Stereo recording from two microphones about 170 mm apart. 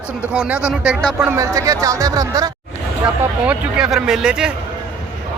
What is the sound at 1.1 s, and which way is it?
Speech, 20° right (ahead or behind).